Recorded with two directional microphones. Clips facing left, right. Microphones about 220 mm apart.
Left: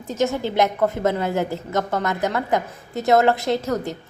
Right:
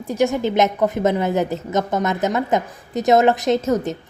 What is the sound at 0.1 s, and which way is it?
A woman's voice, 15° right (ahead or behind).